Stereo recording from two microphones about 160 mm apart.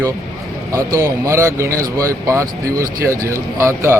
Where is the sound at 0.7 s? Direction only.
20° right (ahead or behind).